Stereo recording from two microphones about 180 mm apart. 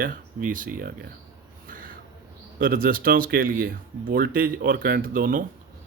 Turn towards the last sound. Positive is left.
turn(degrees=-50)  # may be behind; listen again after turning